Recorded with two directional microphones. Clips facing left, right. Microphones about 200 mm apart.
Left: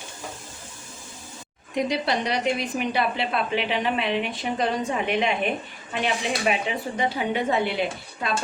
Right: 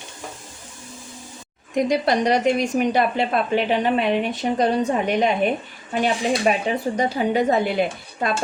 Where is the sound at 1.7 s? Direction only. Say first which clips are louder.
Right 5 dB; 45° right (ahead or behind).